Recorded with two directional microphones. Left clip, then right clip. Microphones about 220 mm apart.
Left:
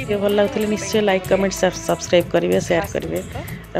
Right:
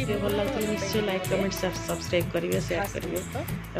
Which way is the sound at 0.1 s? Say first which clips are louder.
Left 11 dB; 35° left (ahead or behind).